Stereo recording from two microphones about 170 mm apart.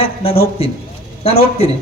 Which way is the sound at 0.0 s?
35° left (ahead or behind).